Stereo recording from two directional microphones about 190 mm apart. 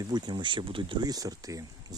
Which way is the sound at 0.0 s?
20° right (ahead or behind).